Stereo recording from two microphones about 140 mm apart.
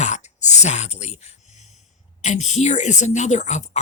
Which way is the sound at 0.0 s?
55° left (ahead or behind).